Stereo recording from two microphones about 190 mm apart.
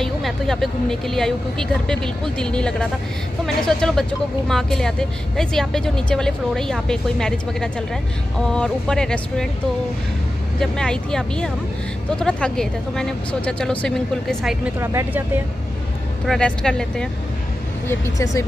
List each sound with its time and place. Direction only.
0.0 s speech: centre (ahead or behind)
10.6 s speech: 5° left (ahead or behind)
14.8 s speech: 15° right (ahead or behind)
16.3 s speech: 5° left (ahead or behind)
17.8 s speech: 15° left (ahead or behind)